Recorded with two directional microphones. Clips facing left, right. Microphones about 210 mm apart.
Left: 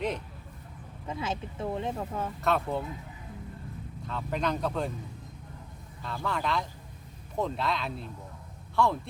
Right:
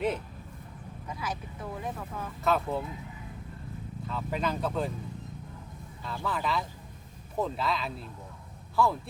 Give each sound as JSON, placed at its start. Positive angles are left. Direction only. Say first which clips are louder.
{"t": 1.0, "sound": "speech", "louder": "left 4 dB", "side_deg": 25}
{"t": 2.4, "sound": "speech", "louder": "right 1 dB", "side_deg": 0}
{"t": 4.0, "sound": "speech", "louder": "left 1 dB", "side_deg": -5}
{"t": 6.0, "sound": "speech", "louder": "left 1 dB", "side_deg": 0}